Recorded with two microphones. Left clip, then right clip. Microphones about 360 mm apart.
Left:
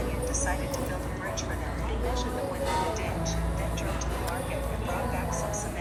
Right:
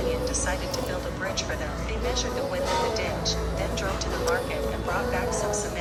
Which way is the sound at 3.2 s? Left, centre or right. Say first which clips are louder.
Right 5 dB; right.